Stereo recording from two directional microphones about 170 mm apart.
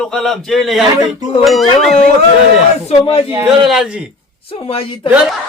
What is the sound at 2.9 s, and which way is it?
Speech, 35° left (ahead or behind).